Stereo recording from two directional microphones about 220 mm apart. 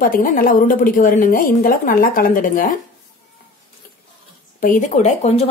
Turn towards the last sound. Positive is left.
turn(degrees=30)  # may be behind; listen again after turning